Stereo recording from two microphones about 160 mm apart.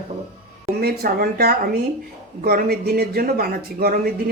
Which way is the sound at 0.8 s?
70° right (ahead or behind).